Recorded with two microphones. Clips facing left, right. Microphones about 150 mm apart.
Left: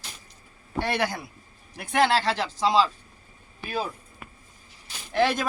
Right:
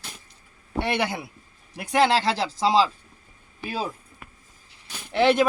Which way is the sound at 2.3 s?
30° right (ahead or behind).